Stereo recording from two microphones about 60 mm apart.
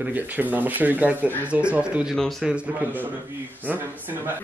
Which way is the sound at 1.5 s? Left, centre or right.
Centre.